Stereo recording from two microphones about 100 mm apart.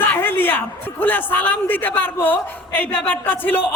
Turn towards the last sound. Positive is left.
turn(degrees=20)  # may be behind; listen again after turning